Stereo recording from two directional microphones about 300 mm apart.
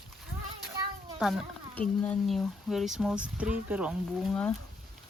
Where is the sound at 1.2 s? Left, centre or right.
Centre.